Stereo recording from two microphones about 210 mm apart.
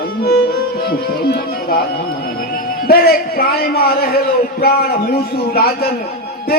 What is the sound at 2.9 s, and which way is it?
A man's voice, 45° left (ahead or behind).